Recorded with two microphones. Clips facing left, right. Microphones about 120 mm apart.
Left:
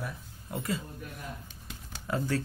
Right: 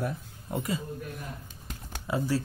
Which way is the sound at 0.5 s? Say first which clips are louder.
Right 2 dB; 15° right (ahead or behind).